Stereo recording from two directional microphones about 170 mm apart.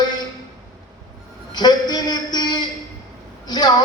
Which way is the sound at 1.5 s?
25° left (ahead or behind).